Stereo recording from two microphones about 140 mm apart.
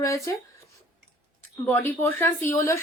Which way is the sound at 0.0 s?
20° left (ahead or behind).